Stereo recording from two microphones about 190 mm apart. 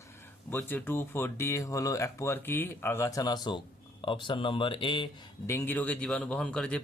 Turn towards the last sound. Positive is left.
turn(degrees=5)  # may be behind; listen again after turning